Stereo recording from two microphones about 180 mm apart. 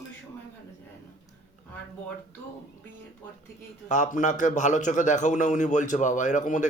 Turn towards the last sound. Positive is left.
turn(degrees=45)  # may be behind; listen again after turning